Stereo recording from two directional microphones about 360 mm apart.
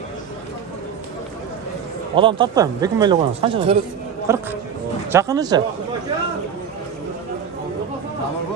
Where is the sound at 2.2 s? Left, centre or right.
Centre.